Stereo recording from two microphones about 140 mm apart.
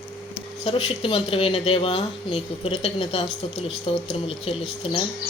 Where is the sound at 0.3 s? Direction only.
45° left (ahead or behind).